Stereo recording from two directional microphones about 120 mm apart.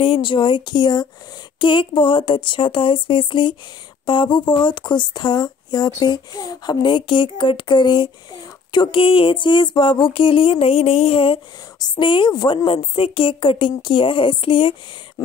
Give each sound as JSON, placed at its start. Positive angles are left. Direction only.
{"t": 0.0, "sound": "a woman's voice", "side_deg": 45}